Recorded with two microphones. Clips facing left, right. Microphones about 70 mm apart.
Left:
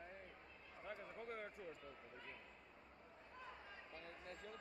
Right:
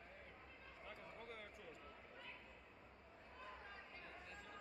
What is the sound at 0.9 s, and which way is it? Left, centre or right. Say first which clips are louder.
Speech: left 5 dB; left.